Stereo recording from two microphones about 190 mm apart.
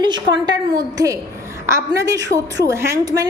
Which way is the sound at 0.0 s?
25° right (ahead or behind).